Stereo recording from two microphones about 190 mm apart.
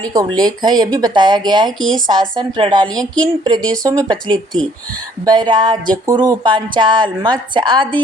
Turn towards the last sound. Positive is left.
turn(degrees=-25)  # may be behind; listen again after turning